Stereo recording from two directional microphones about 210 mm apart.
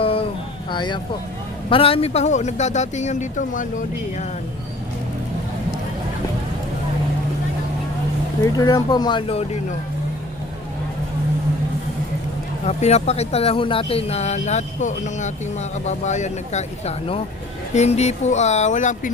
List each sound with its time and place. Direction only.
0.0 s a sound: 25° left (ahead or behind)
0.7 s speech: 20° left (ahead or behind); by 4.3 s 40° left (ahead or behind)
8.5 s speech: 20° left (ahead or behind)
12.6 s speech: 30° left (ahead or behind)